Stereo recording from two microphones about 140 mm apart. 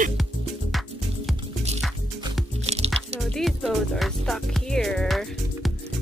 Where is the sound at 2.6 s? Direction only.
45° right (ahead or behind).